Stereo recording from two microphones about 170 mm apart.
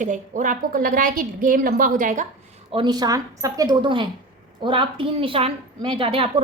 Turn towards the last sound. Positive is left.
turn(degrees=-30)  # may be behind; listen again after turning